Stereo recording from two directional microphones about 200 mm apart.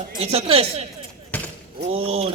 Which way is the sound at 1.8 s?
30° right (ahead or behind).